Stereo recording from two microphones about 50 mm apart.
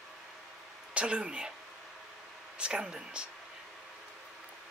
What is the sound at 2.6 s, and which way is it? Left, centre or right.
Speech, centre.